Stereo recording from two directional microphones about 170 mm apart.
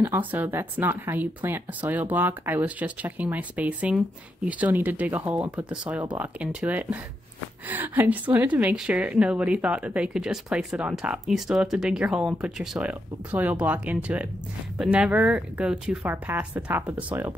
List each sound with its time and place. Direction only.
0.0 s a woman's voice: 10° right (ahead or behind)